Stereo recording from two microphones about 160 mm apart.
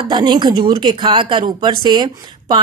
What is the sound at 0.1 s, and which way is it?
A woman's voice, 25° right (ahead or behind).